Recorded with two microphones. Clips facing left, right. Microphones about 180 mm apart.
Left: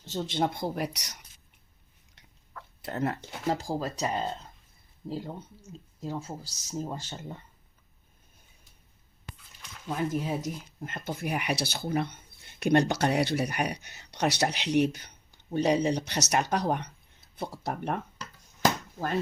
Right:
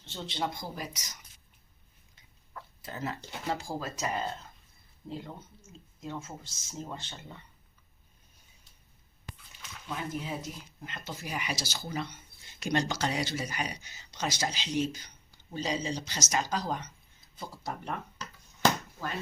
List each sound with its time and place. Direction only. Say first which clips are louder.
0.0 s speech: left 6 dB; 40° left (ahead or behind); by 1.1 s 65° left (ahead or behind)
2.8 s speech: left 7 dB; 60° left (ahead or behind)
3.5 s speech: left 4 dB; 35° left (ahead or behind)
9.8 s speech: left 7 dB; 45° left (ahead or behind)